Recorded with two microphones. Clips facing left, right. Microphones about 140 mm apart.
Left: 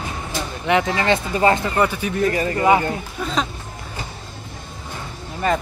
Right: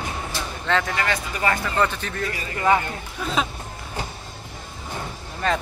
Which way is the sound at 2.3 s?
45° left (ahead or behind).